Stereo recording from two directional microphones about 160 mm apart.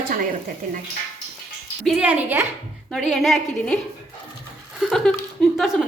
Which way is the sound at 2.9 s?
Centre (ahead or behind).